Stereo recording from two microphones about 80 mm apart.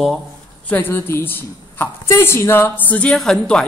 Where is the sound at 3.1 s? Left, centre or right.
Centre.